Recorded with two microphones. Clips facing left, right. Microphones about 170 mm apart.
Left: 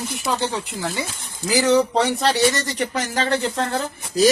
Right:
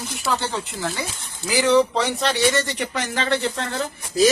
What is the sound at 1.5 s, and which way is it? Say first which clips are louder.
Speech: even; 40° left (ahead or behind).